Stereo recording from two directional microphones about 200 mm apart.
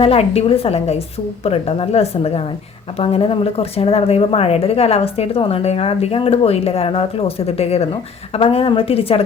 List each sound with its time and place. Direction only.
0.0 s a woman's voice: 30° left (ahead or behind)